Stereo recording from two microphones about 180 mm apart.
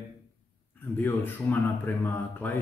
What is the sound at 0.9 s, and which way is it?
Speech, 10° left (ahead or behind).